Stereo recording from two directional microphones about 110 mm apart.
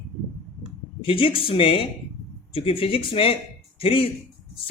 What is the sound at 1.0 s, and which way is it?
Speech, 55° left (ahead or behind).